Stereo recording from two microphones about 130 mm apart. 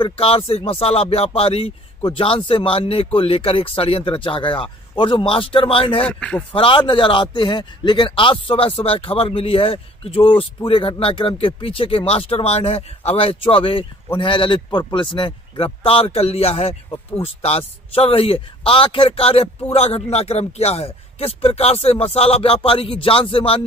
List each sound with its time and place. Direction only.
0.0 s a man's voice: 45° left (ahead or behind)
6.0 s speech: 10° left (ahead or behind)
6.5 s a man's voice: 40° left (ahead or behind)